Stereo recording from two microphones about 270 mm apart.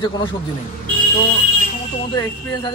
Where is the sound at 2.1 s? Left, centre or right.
Centre.